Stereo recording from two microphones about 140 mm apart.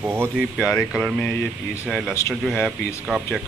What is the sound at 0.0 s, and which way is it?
Speech, 15° right (ahead or behind).